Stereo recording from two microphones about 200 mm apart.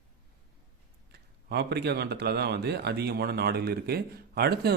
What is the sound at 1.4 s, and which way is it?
A man's voice, 55° right (ahead or behind).